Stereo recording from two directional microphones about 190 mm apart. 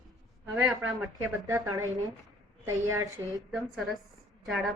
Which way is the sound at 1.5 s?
15° right (ahead or behind).